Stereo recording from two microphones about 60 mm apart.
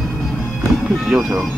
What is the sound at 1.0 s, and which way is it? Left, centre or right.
Speech, centre.